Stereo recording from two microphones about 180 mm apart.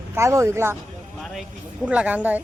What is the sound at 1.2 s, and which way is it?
Vehicle, centre (ahead or behind).